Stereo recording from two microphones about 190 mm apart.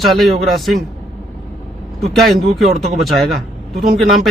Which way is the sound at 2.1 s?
Centre (ahead or behind).